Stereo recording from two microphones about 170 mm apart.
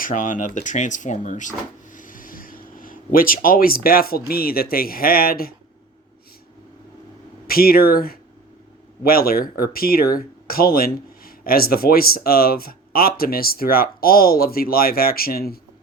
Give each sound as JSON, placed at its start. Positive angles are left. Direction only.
{"t": 0.0, "sound": "speech", "side_deg": 50}
{"t": 7.4, "sound": "speech", "side_deg": 60}